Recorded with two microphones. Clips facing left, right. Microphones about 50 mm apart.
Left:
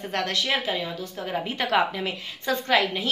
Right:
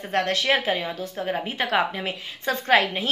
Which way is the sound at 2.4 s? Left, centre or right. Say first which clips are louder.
Right 2 dB; right.